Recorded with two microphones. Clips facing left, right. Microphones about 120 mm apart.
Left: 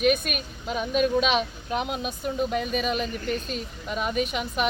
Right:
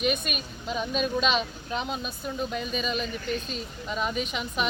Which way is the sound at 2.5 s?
60° left (ahead or behind).